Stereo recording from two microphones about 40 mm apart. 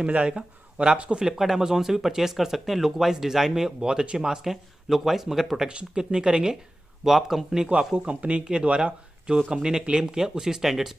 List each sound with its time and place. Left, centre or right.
0.0 s speech: right
1.2 s speech: centre
5.7 s speech: right
7.1 s speech: centre
7.9 s speech: right; by 11.0 s centre